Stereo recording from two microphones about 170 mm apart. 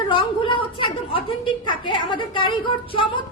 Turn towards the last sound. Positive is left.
turn(degrees=30)  # may be behind; listen again after turning